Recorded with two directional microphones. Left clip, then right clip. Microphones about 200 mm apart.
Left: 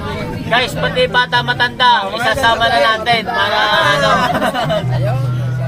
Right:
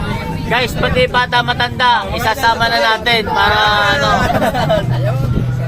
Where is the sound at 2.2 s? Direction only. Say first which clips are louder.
Even; 35° right (ahead or behind).